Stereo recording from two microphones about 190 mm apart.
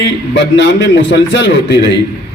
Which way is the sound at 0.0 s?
65° left (ahead or behind).